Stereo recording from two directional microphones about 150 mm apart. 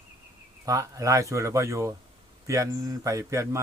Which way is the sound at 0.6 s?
20° right (ahead or behind).